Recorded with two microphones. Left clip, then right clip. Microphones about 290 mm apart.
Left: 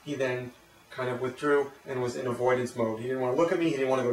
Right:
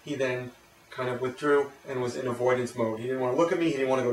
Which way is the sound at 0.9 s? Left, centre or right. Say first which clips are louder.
Right 1 dB; centre.